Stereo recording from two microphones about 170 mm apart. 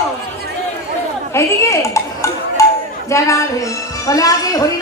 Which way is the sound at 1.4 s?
15° left (ahead or behind).